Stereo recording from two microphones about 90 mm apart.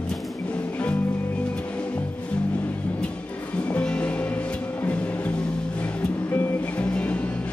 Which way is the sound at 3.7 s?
10° left (ahead or behind).